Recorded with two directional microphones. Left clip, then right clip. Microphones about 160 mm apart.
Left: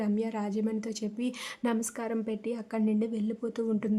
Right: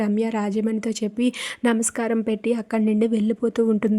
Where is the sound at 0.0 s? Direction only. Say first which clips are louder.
Right 9 dB; 40° right (ahead or behind).